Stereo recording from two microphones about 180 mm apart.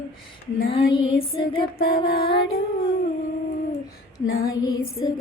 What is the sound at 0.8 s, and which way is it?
Female singing, 60° left (ahead or behind).